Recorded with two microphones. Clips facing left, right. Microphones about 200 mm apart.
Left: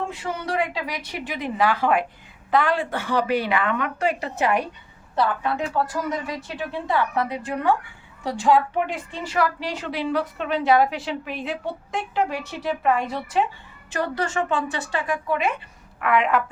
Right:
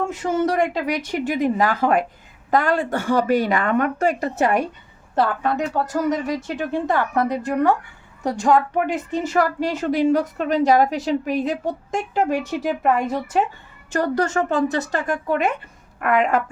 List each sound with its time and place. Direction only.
0.0 s a woman's voice: 45° right (ahead or behind)